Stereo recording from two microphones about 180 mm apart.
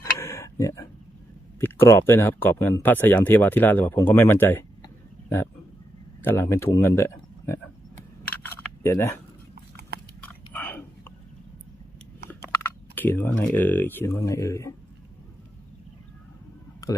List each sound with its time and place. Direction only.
0.0 s tick-tock: 15° left (ahead or behind)
1.6 s speech: 15° left (ahead or behind)
6.2 s speech: 15° left (ahead or behind)
8.4 s a sound: 15° left (ahead or behind)
10.2 s whispering: 10° left (ahead or behind)
12.9 s speech: 10° left (ahead or behind)